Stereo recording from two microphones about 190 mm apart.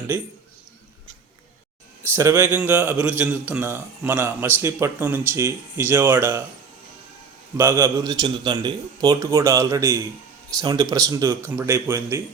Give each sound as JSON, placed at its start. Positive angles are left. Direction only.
{"t": 2.1, "sound": "a man's voice", "side_deg": -10}
{"t": 7.5, "sound": "a man's voice", "side_deg": -15}